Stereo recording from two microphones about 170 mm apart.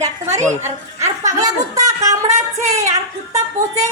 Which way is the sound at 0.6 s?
15° right (ahead or behind).